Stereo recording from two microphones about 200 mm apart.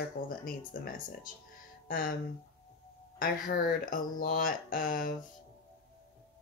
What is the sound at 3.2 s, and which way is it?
Speech, 45° left (ahead or behind).